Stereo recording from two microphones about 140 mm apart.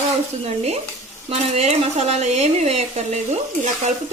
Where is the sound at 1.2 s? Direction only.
50° right (ahead or behind).